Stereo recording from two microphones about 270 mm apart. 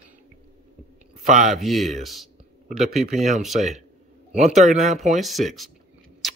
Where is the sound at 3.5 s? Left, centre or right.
Right.